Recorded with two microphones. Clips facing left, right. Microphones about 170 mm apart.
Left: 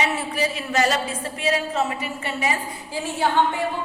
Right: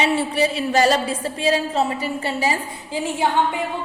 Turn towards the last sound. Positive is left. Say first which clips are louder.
# right 1 dB
turn(degrees=-20)  # may be behind; listen again after turning